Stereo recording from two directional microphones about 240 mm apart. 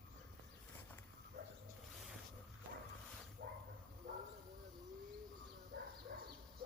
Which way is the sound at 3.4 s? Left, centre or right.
Right.